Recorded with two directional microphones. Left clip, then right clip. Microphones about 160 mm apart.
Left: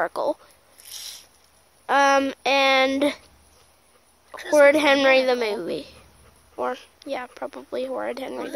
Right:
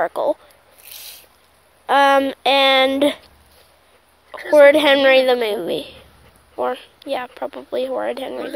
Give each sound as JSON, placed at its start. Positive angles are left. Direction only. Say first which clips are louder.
{"t": 0.1, "sound": "speech", "louder": "right 5 dB", "side_deg": 25}
{"t": 0.8, "sound": "a sound", "louder": "left 1 dB", "side_deg": -30}
{"t": 1.9, "sound": "speech", "louder": "right 5 dB", "side_deg": 5}
{"t": 4.3, "sound": "speech", "louder": "right 5 dB", "side_deg": 15}